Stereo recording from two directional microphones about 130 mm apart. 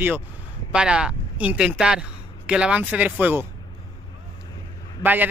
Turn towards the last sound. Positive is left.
turn(degrees=-15)  # may be behind; listen again after turning